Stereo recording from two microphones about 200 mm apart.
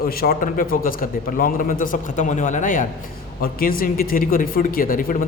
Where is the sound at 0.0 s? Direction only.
50° left (ahead or behind).